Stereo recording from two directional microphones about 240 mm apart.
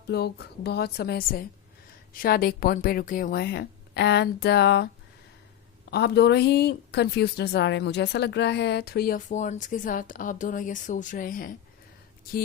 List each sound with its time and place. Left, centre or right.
0.1 s a woman's voice: left
5.9 s a woman's voice: left